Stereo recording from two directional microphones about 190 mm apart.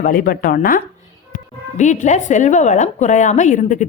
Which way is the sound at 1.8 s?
40° left (ahead or behind).